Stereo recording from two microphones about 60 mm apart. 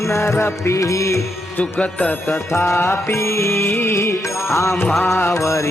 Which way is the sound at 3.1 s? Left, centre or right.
Left.